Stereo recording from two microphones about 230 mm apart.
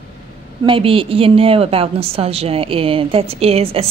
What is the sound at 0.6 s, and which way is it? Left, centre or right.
A woman's voice, right.